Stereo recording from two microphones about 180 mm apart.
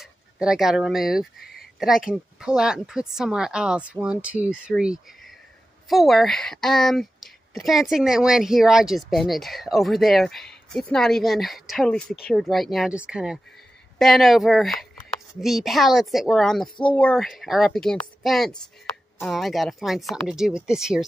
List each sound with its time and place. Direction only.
0.0 s speech: 5° right (ahead or behind)
16.6 s speech: 25° left (ahead or behind)
16.9 s speech: 5° left (ahead or behind)